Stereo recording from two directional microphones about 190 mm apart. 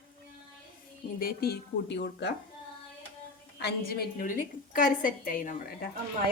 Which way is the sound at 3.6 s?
55° left (ahead or behind).